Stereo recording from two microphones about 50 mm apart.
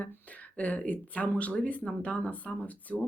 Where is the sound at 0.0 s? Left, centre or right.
Left.